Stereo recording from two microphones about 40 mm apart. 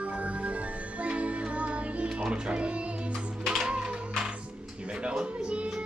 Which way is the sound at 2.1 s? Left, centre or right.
Right.